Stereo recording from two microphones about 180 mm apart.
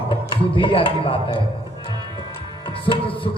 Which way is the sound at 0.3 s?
30° left (ahead or behind).